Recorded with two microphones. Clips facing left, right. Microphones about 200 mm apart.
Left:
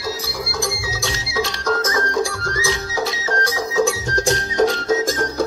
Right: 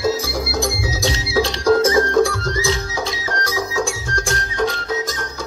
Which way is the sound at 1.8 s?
30° right (ahead or behind).